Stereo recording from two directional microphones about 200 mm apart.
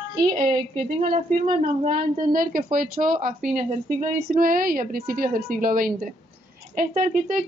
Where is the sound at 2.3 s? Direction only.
45° right (ahead or behind).